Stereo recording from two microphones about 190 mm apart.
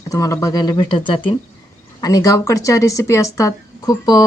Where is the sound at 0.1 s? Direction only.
15° left (ahead or behind).